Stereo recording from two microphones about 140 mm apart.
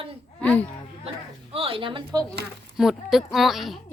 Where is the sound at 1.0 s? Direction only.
45° right (ahead or behind).